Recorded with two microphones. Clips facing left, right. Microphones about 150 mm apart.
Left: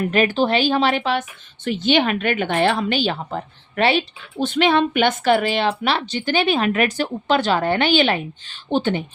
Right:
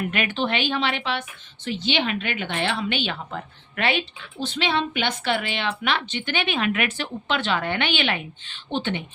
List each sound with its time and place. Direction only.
0.0 s a woman's voice: 35° left (ahead or behind)
4.4 s a woman's voice: 55° left (ahead or behind); by 9.0 s 40° left (ahead or behind)